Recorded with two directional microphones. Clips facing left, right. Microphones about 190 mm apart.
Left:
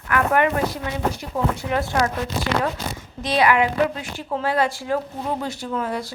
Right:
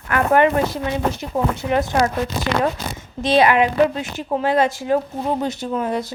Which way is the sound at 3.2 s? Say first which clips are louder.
Right 4 dB; 25° right (ahead or behind).